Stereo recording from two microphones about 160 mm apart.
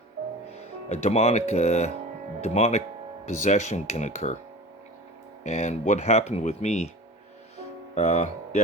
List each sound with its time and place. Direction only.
0.9 s speech: 45° left (ahead or behind)
5.4 s speech: 45° left (ahead or behind)
7.9 s speech: 45° left (ahead or behind)